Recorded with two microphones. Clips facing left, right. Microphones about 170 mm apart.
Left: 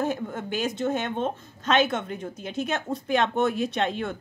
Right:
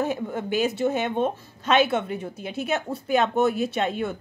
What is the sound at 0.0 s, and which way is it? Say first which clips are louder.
Speech: right 2 dB; 10° right (ahead or behind).